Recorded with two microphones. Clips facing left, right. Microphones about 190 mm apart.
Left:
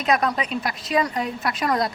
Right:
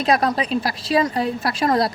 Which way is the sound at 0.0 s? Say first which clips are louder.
Right 3 dB; 35° right (ahead or behind).